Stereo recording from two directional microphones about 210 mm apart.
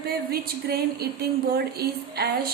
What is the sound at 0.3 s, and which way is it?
A woman's voice, 45° right (ahead or behind).